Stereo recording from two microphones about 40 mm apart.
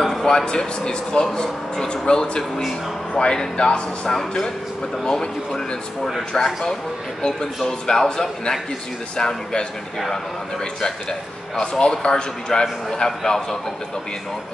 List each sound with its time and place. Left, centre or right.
0.0 s a sound: centre
0.5 s a man's voice: left
7.8 s a man's voice: centre
10.8 s a man's voice: centre